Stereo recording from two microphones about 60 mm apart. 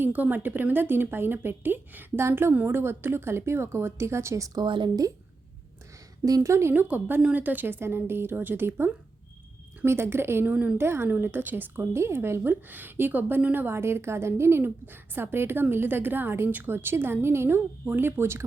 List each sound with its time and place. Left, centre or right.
0.0 s a woman's voice: right
6.2 s speech: right
6.5 s a woman's voice: right
6.7 s a woman's voice: right
10.4 s a woman's voice: right
10.8 s a woman's voice: right
11.1 s a woman's voice: right
11.9 s a woman's voice: right